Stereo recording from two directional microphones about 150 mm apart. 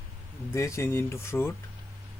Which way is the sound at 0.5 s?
20° left (ahead or behind).